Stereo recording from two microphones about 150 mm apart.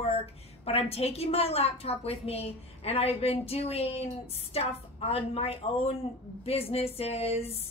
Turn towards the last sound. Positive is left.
turn(degrees=45)  # may be behind; listen again after turning